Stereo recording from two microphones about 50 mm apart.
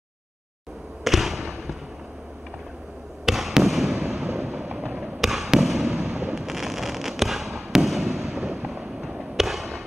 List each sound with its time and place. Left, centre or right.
1.0 s basketball bounce: centre
3.3 s basketball bounce: centre
4.0 s a sound: centre
4.7 s fireworks: right
5.2 s fireworks: centre